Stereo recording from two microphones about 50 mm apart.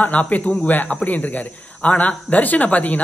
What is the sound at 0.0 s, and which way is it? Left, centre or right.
A man's voice, left.